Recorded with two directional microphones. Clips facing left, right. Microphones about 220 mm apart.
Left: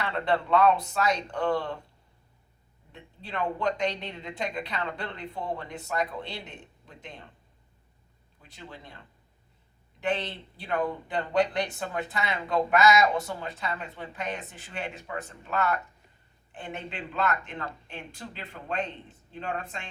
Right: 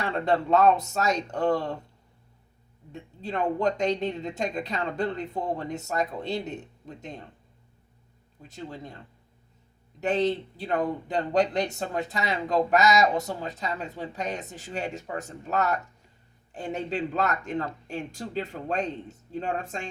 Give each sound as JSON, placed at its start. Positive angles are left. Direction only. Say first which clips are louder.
{"t": 0.0, "sound": "speech", "louder": "right 2 dB", "side_deg": -45}
{"t": 2.9, "sound": "speech", "louder": "right 5 dB", "side_deg": -45}
{"t": 11.1, "sound": "speech", "louder": "right 2 dB", "side_deg": -40}